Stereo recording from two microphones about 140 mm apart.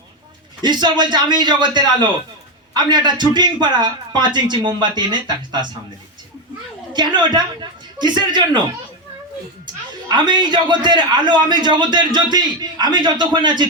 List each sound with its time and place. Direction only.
0.6 s a man's voice: 30° right (ahead or behind)
6.9 s a woman's voice: 30° right (ahead or behind)
10.1 s a man's voice: 30° right (ahead or behind)